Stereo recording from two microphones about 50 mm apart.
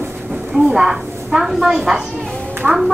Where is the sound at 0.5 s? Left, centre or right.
Centre.